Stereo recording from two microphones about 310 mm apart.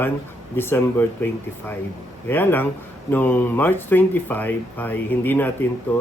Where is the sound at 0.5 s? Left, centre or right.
Centre.